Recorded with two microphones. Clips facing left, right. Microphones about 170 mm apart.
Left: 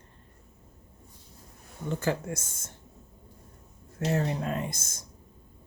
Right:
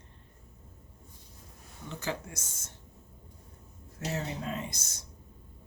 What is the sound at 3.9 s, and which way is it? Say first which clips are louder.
Speech: left 7 dB; 60° left (ahead or behind).